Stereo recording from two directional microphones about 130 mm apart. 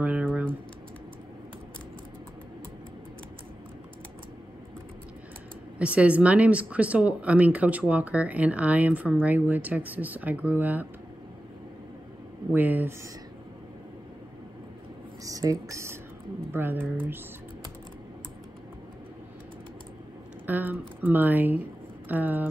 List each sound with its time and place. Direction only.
0.0 s typing: 10° right (ahead or behind)
5.8 s speech: 10° right (ahead or behind)
12.5 s speech: 15° right (ahead or behind)
15.2 s speech: 25° right (ahead or behind)
20.4 s speech: 15° right (ahead or behind)